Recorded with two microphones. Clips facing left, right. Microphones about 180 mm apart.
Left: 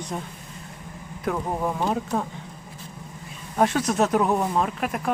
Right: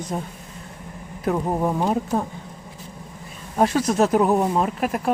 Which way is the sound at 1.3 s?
20° right (ahead or behind).